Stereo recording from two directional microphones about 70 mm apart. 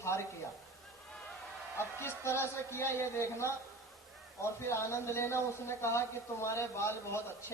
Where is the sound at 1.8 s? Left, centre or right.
Left.